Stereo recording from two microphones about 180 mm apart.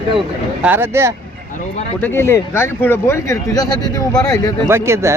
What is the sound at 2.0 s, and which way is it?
Speech, 10° left (ahead or behind).